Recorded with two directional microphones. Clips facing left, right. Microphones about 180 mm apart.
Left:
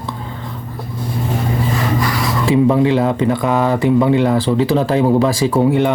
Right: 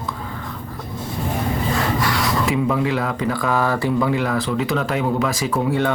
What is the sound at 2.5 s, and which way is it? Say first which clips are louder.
Speech: left 11 dB; 25° left (ahead or behind).